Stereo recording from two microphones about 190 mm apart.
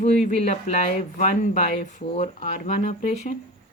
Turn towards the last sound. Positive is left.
turn(degrees=40)  # may be behind; listen again after turning